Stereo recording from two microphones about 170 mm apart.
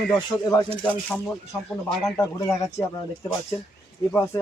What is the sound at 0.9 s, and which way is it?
Speech, 10° left (ahead or behind).